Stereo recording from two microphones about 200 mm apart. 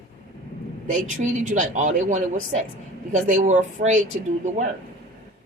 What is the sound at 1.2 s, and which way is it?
A woman's voice, 40° right (ahead or behind).